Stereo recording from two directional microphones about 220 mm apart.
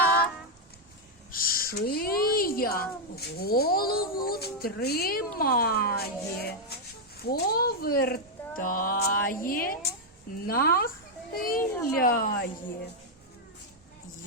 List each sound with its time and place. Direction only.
1.3 s a woman's voice: 40° left (ahead or behind)
11.6 s speech: 10° left (ahead or behind)
11.9 s a woman's voice: 40° left (ahead or behind)